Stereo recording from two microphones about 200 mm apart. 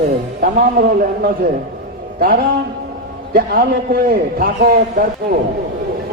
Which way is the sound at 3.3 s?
45° right (ahead or behind).